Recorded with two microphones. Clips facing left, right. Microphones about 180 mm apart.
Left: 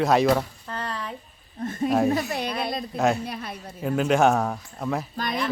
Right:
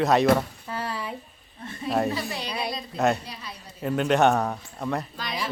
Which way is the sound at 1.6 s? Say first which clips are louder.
Left 4 dB; 45° left (ahead or behind).